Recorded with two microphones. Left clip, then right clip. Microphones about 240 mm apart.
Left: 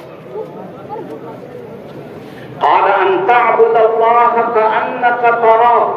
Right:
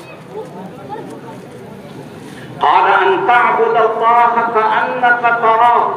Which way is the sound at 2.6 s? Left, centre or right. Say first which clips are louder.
Even; right.